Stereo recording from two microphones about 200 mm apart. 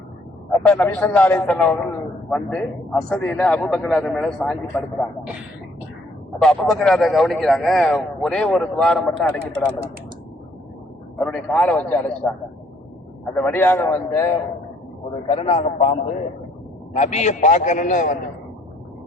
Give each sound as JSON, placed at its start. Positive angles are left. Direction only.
{"t": 0.6, "sound": "a man's voice", "side_deg": 5}
{"t": 6.4, "sound": "a man's voice", "side_deg": 5}
{"t": 11.3, "sound": "a man's voice", "side_deg": 0}
{"t": 15.3, "sound": "a man's voice", "side_deg": 30}